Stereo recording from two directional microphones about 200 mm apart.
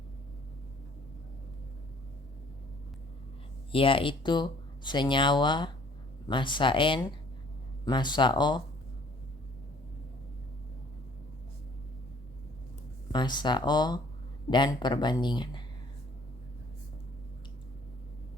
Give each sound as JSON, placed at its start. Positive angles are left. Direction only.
{"t": 3.7, "sound": "speech", "side_deg": 25}
{"t": 13.1, "sound": "speech", "side_deg": 20}